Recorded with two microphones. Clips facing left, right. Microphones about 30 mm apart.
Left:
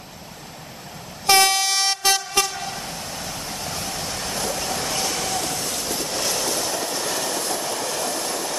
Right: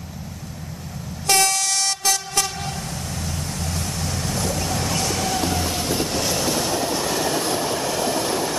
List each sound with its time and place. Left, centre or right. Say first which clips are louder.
1.2 s train: left 3 dB; left
2.7 s vehicle: right 1 dB; centre